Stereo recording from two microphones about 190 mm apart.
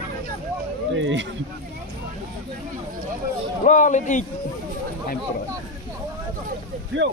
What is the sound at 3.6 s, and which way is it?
Speech, 40° left (ahead or behind).